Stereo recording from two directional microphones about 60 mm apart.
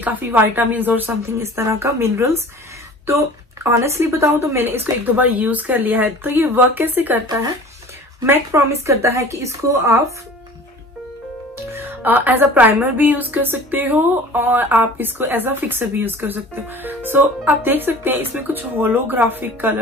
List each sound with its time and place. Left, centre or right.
0.0 s a woman's voice: right
1.4 s speech: right
4.3 s a woman's voice: right
8.8 s speech: right
11.7 s a woman's voice: right